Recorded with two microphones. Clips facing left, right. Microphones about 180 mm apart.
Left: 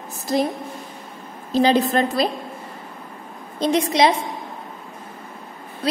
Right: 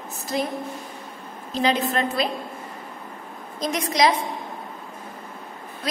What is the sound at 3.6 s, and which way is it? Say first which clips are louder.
Speech: left 4 dB; 30° left (ahead or behind).